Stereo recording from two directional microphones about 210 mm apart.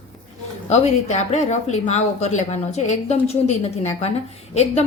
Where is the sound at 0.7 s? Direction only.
30° left (ahead or behind).